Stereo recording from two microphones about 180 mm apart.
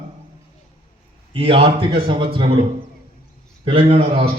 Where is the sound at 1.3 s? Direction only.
30° right (ahead or behind).